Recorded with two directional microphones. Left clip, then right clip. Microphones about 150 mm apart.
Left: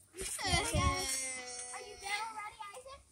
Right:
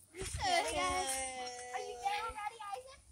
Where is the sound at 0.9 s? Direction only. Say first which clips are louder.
Even; 10° left (ahead or behind).